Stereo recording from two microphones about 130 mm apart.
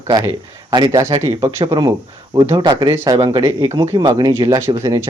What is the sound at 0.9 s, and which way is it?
A man's voice, 25° right (ahead or behind).